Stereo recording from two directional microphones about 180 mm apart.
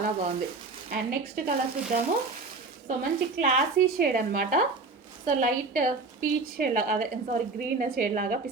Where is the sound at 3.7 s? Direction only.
50° right (ahead or behind).